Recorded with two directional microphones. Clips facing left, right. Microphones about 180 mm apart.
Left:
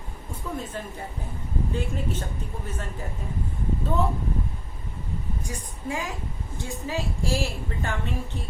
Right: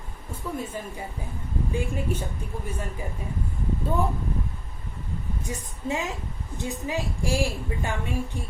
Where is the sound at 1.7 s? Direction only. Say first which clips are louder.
Right 3 dB; 10° right (ahead or behind).